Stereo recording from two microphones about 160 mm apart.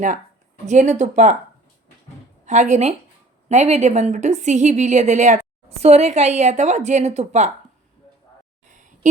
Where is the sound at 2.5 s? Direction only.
50° right (ahead or behind).